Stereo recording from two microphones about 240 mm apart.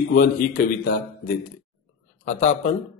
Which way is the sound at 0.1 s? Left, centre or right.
Left.